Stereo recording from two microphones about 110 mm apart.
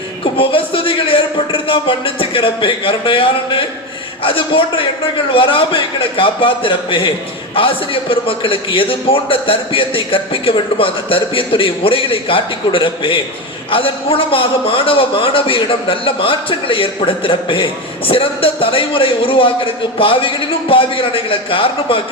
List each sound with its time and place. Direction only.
0.3 s a man's voice: 55° left (ahead or behind)
8.1 s a man's voice: 55° left (ahead or behind)